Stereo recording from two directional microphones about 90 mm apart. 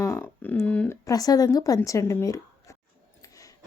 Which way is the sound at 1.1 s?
45° left (ahead or behind).